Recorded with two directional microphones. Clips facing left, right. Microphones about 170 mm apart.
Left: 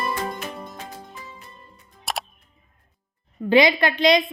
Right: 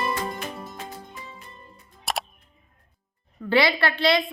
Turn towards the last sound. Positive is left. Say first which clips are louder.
# left 4 dB
turn(degrees=15)  # may be behind; listen again after turning